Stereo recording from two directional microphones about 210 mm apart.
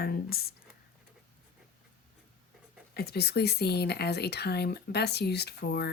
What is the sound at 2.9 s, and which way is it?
Speech, 50° left (ahead or behind).